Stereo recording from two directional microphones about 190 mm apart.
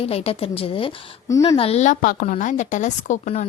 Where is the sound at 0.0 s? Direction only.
30° left (ahead or behind).